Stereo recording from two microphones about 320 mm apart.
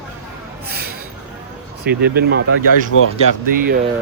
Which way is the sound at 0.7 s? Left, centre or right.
Right.